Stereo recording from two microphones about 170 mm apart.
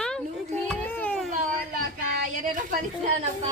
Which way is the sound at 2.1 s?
60° right (ahead or behind).